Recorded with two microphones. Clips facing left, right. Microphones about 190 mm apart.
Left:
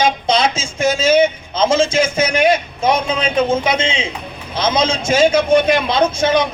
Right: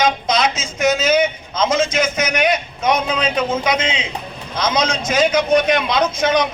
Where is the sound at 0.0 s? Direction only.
30° left (ahead or behind).